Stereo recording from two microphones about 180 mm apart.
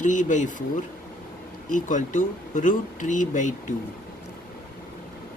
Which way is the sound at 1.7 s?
45° left (ahead or behind).